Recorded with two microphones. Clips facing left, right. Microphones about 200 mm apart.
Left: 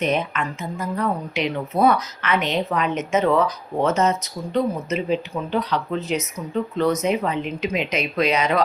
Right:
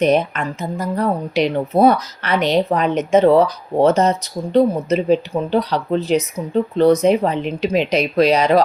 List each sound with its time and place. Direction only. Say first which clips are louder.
0.0 s speech: right 7 dB; 35° right (ahead or behind)